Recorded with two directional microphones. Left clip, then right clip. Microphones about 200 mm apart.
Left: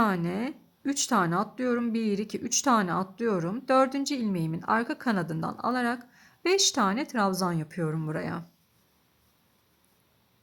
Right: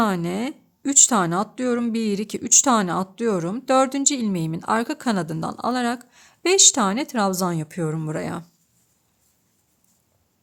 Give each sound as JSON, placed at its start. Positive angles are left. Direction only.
{"t": 0.0, "sound": "speech", "side_deg": -30}